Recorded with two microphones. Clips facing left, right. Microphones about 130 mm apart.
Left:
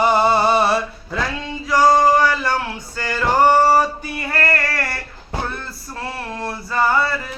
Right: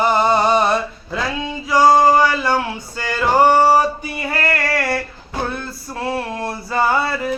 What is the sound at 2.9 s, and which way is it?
Music, 20° right (ahead or behind).